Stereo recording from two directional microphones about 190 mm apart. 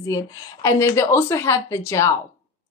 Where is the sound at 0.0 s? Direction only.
15° left (ahead or behind).